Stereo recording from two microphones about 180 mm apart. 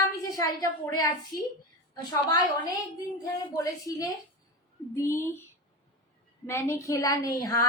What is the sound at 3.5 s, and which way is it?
Child singing, 20° left (ahead or behind).